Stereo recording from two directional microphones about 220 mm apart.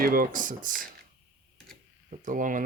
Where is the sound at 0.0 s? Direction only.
40° right (ahead or behind).